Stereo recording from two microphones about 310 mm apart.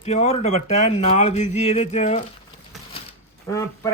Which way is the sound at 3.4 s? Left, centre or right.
Centre.